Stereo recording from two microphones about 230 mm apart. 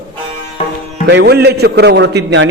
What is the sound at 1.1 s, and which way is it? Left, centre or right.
Mantra, right.